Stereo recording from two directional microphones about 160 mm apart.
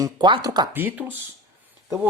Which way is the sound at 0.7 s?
10° right (ahead or behind).